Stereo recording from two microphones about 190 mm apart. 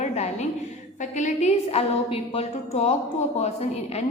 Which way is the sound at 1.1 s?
40° left (ahead or behind).